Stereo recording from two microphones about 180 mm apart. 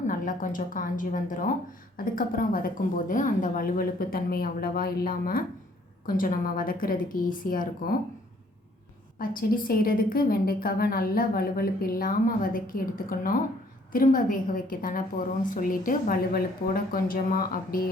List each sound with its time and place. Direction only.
0.1 s a woman's voice: 50° left (ahead or behind)
9.1 s a woman's voice: 55° left (ahead or behind)